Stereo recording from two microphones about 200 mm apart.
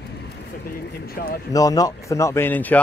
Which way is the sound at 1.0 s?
50° left (ahead or behind).